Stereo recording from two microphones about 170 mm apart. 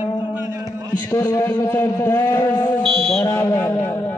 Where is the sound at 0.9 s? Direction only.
15° left (ahead or behind).